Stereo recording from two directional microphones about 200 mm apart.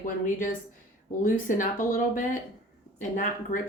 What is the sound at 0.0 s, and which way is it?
A woman's voice, 40° left (ahead or behind).